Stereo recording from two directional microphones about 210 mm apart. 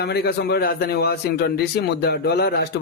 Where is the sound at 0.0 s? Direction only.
50° left (ahead or behind).